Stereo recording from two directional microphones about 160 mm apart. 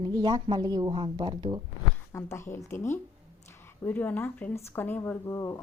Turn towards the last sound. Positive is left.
turn(degrees=20)  # may be behind; listen again after turning